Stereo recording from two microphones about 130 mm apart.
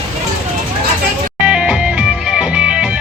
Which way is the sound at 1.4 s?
5° right (ahead or behind).